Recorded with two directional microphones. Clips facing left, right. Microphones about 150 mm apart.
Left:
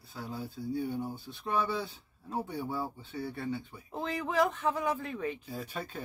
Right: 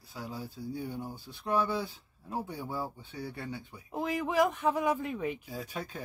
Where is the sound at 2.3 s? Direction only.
10° right (ahead or behind).